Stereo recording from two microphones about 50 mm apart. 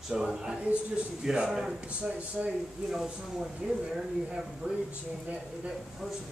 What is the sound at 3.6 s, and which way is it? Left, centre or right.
A man's voice, centre.